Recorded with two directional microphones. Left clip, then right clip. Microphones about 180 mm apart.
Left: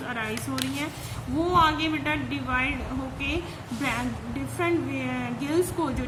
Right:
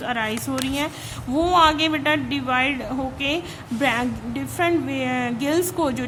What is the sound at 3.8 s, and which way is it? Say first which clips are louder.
A woman's voice: right 7 dB; 45° right (ahead or behind).